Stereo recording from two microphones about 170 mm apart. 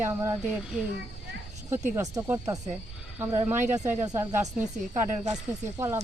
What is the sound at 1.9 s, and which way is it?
Speech, 20° right (ahead or behind).